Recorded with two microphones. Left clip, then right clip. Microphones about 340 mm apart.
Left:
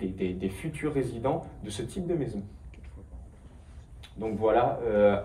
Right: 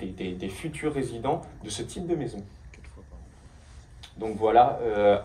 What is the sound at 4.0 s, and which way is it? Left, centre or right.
Speech, right.